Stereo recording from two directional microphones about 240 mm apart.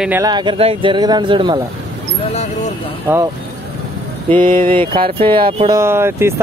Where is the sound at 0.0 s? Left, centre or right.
Centre.